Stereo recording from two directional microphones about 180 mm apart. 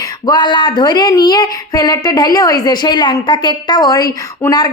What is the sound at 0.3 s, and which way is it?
Speech, 25° left (ahead or behind).